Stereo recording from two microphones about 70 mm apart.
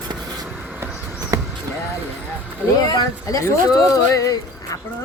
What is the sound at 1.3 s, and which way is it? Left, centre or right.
Vehicle, right.